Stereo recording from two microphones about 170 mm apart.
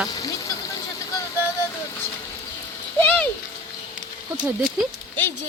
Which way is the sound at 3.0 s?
10° left (ahead or behind).